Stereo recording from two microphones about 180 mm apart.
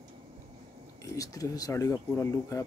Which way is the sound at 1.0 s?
20° left (ahead or behind).